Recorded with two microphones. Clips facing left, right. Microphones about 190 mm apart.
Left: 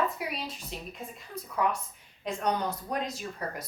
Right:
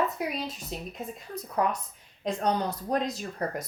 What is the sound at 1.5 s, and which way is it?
A woman's voice, 40° right (ahead or behind).